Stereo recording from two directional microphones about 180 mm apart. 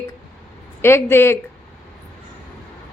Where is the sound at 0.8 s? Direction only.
15° left (ahead or behind).